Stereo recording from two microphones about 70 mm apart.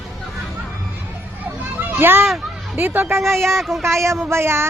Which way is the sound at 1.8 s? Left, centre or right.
Right.